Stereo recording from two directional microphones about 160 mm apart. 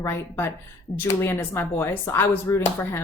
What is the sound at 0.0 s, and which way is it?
A woman's voice, 15° left (ahead or behind).